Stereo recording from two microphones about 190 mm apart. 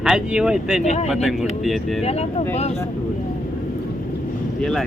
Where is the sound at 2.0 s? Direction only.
35° left (ahead or behind).